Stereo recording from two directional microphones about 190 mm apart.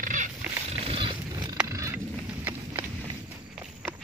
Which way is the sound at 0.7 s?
30° right (ahead or behind).